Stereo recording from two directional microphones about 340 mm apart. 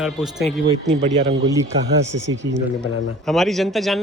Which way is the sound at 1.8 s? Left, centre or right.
Right.